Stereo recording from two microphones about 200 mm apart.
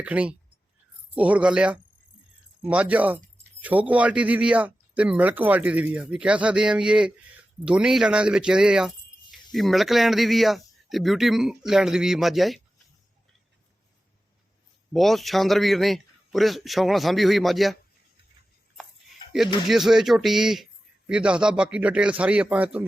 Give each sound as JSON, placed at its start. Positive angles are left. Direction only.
{"t": 0.0, "sound": "a man's voice", "side_deg": -5}
{"t": 14.9, "sound": "a man's voice", "side_deg": 0}
{"t": 19.6, "sound": "a man's voice", "side_deg": 0}